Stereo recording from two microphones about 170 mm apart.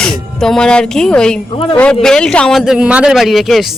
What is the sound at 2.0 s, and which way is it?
A man's voice, 5° left (ahead or behind).